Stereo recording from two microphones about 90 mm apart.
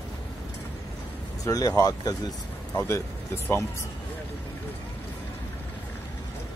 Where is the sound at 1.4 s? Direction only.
40° left (ahead or behind).